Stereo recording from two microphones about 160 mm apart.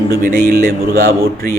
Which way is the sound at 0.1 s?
65° right (ahead or behind).